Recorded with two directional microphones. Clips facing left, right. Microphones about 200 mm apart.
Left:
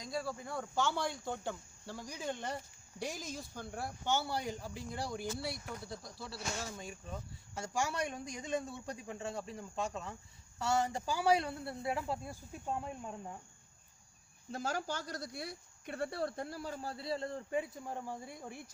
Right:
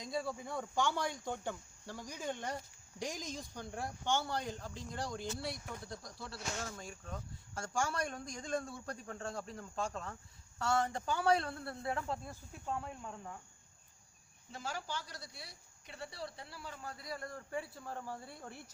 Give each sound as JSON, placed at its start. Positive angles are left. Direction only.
{"t": 0.0, "sound": "speech", "side_deg": 0}
{"t": 14.5, "sound": "speech", "side_deg": 45}